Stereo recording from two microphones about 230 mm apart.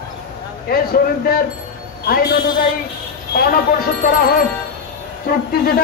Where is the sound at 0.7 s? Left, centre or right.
Left.